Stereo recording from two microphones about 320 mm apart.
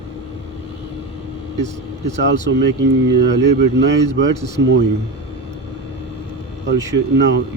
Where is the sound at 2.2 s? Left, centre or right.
Right.